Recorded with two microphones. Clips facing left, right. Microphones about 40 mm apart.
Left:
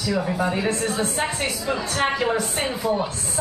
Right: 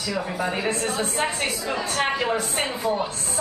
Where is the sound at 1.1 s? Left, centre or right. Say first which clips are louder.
Even; centre.